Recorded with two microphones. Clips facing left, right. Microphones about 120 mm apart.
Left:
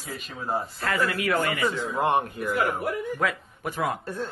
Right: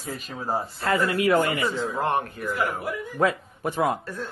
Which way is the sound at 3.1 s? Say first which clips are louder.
Right 4 dB; 30° right (ahead or behind).